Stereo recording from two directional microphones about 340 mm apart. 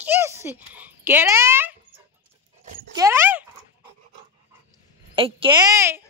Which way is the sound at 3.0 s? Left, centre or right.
Centre.